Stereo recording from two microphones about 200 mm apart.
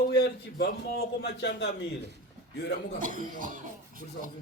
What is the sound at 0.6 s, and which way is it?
A man's voice, 55° left (ahead or behind).